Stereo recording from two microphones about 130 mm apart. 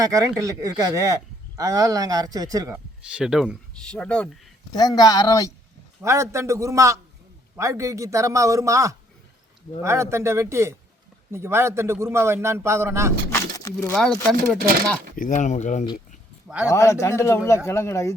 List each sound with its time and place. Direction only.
0.0 s speech: 25° right (ahead or behind)
2.7 s speech: 10° right (ahead or behind)
3.8 s speech: 5° left (ahead or behind)
4.7 s a man's voice: 30° left (ahead or behind)
6.0 s speech: 20° right (ahead or behind)
13.6 s speech: 25° left (ahead or behind)
13.9 s speech: 5° left (ahead or behind)
15.1 s speech: 85° left; by 15.9 s 70° left (ahead or behind)
16.6 s a man's voice: 20° left (ahead or behind)